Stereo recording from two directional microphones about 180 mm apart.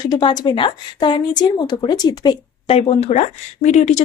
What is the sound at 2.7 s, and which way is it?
Speech, 35° left (ahead or behind).